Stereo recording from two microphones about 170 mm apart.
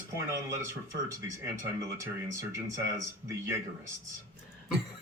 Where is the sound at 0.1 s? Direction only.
20° right (ahead or behind).